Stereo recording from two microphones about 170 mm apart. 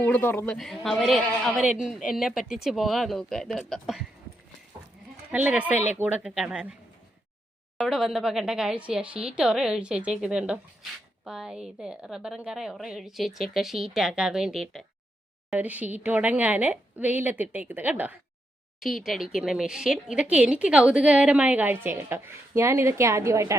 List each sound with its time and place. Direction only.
0.0 s a man's voice: 10° left (ahead or behind)
0.5 s a woman's voice: centre (ahead or behind)
5.3 s a woman's voice: 10° right (ahead or behind)
7.8 s a woman's voice: centre (ahead or behind)